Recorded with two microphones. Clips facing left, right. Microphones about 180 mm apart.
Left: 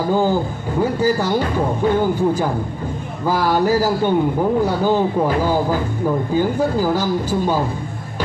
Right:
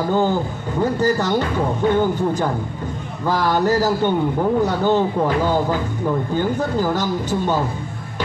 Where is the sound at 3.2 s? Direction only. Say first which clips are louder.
Left 1 dB; 10° left (ahead or behind).